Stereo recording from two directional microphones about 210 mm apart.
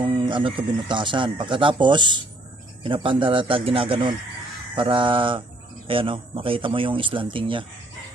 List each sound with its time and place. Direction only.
0.0 s speech: 25° right (ahead or behind)